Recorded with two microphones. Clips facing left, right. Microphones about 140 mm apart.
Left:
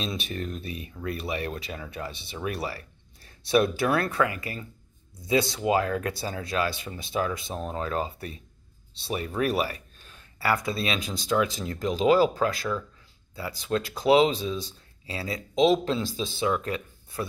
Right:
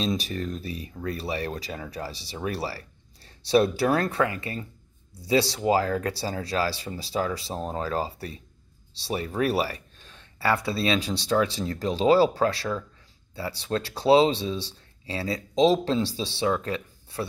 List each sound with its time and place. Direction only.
0.0 s speech: 35° right (ahead or behind)